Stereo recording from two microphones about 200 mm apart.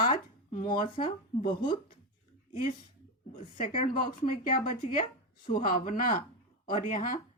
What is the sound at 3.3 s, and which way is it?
Speech, 30° left (ahead or behind).